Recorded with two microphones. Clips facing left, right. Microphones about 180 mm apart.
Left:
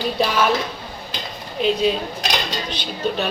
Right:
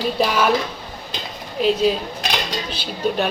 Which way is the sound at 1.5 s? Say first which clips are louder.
Right 1 dB; centre (ahead or behind).